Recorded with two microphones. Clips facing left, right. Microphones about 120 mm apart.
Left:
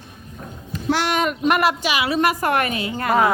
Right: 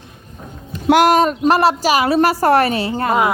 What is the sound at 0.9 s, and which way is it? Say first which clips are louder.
A woman's voice: right 9 dB; 40° right (ahead or behind).